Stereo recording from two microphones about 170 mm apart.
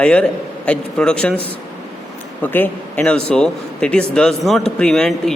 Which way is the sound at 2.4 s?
10° left (ahead or behind).